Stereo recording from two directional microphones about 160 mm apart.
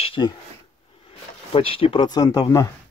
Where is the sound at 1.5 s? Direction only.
35° left (ahead or behind).